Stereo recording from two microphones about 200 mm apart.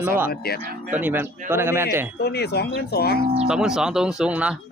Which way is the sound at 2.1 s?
55° left (ahead or behind).